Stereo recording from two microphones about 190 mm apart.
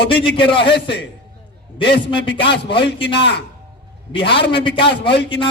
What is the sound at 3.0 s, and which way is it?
Speech, 65° left (ahead or behind).